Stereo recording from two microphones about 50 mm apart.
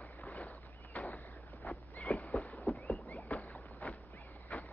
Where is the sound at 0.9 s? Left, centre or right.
Left.